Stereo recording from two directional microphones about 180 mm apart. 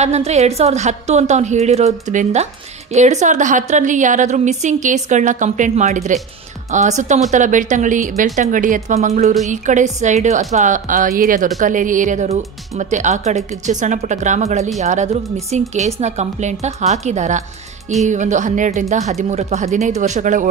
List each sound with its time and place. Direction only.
0.0 s a woman's voice: 40° right (ahead or behind)